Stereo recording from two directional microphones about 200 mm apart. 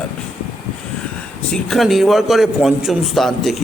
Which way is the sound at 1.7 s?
Centre (ahead or behind).